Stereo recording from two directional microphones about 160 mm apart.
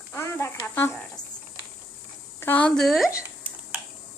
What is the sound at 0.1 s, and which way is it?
Speech, 15° left (ahead or behind).